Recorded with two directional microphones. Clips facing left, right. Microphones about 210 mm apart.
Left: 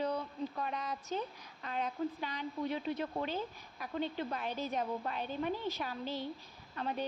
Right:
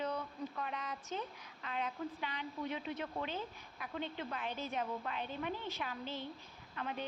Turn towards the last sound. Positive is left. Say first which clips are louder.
# left 4 dB
turn(degrees=35)  # may be behind; listen again after turning